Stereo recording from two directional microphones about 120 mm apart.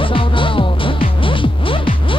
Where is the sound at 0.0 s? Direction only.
45° left (ahead or behind).